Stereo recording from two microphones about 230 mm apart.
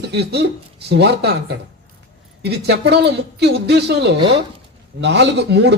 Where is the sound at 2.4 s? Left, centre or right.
Right.